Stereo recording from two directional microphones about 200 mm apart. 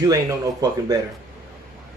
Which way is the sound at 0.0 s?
20° right (ahead or behind).